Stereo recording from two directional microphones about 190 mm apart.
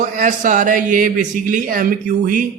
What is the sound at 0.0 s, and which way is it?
Speech, 45° right (ahead or behind).